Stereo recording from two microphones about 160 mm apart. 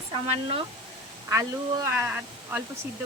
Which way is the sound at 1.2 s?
20° right (ahead or behind).